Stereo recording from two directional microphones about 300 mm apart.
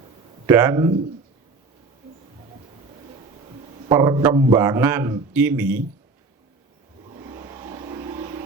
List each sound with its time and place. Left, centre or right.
0.4 s speech: centre
3.8 s a man's voice: centre
7.1 s vehicle: centre